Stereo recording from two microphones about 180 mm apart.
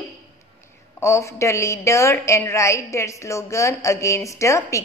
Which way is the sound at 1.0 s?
15° left (ahead or behind).